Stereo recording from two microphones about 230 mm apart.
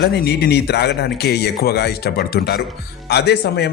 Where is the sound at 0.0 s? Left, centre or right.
Left.